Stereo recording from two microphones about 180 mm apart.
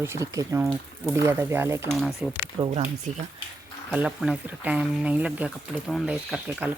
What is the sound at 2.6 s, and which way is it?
Speech, 35° right (ahead or behind).